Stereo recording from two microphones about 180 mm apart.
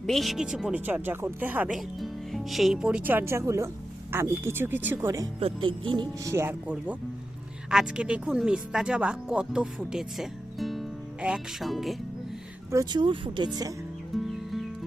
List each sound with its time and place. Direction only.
0.0 s speech: centre (ahead or behind); by 5.3 s 15° right (ahead or behind)
5.4 s speech: 30° right (ahead or behind); by 11.9 s centre (ahead or behind)
12.7 s speech: 25° right (ahead or behind)
14.1 s music: centre (ahead or behind)